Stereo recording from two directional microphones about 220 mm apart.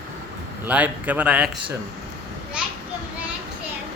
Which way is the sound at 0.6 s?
5° right (ahead or behind).